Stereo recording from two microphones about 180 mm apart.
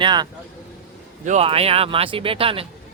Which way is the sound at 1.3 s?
35° right (ahead or behind).